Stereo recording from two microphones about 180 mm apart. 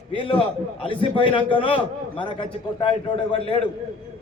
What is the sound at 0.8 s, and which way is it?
A man's voice, 30° left (ahead or behind).